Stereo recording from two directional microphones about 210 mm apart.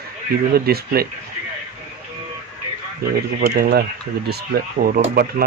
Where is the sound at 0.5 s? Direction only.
45° right (ahead or behind).